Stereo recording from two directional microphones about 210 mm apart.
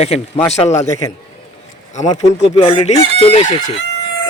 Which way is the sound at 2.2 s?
30° left (ahead or behind).